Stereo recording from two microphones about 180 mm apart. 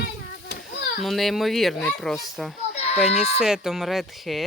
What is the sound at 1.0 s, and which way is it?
Speech, centre (ahead or behind).